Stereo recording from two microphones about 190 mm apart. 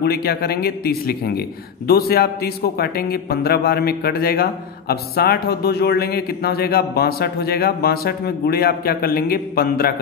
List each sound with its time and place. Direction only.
0.0 s a man's voice: 55° left (ahead or behind)